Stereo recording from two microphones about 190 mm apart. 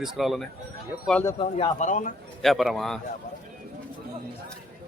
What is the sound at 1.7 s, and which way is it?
Speech, 40° left (ahead or behind).